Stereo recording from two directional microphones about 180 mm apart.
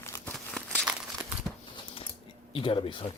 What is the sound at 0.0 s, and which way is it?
Crumpling, 10° left (ahead or behind).